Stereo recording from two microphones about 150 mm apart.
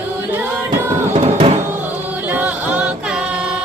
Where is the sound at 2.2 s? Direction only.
10° right (ahead or behind).